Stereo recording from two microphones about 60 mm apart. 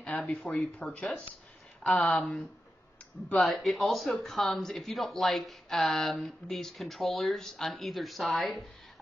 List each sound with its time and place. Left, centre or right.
0.1 s speech: left
3.3 s a woman's voice: centre